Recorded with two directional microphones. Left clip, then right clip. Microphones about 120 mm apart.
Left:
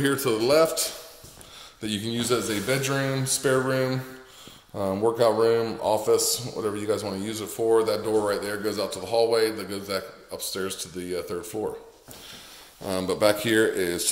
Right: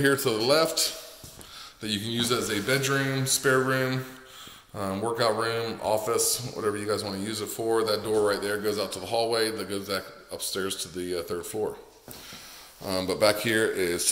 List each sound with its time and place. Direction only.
0.0 s speech: 20° left (ahead or behind); by 4.0 s 45° left (ahead or behind)
4.7 s speech: 35° left (ahead or behind)
5.1 s speech: 55° left (ahead or behind)
5.9 s speech: 30° left (ahead or behind); by 11.4 s 15° left (ahead or behind)
12.8 s speech: 25° left (ahead or behind)